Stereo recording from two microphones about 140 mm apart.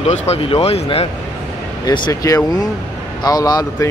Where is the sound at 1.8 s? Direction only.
30° left (ahead or behind).